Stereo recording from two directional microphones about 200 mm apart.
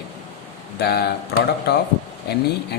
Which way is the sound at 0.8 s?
55° left (ahead or behind).